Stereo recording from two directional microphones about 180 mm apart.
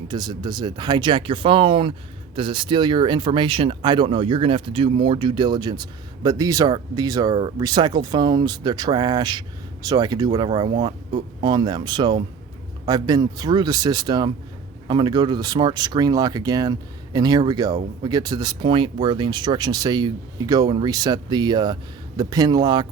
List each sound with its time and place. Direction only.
0.1 s speech: 25° right (ahead or behind)